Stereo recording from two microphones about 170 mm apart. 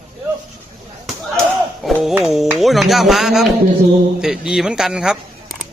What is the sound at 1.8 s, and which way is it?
Speech, centre (ahead or behind).